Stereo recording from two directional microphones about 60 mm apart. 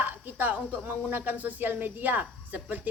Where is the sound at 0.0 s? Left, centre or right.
Right.